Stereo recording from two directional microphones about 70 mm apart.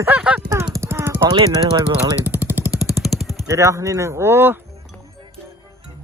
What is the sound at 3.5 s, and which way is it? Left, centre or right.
Speech, right.